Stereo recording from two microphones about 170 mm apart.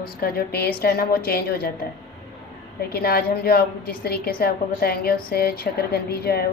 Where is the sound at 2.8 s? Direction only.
65° left (ahead or behind).